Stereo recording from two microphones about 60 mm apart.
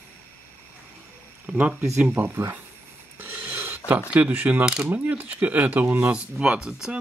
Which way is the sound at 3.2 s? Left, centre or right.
Right.